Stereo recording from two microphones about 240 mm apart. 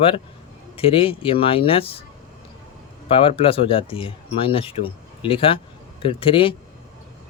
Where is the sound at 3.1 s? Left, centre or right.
Left.